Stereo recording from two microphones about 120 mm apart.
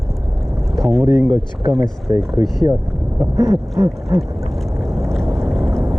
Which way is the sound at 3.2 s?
30° right (ahead or behind).